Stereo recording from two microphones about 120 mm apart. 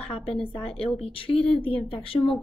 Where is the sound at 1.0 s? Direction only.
50° left (ahead or behind).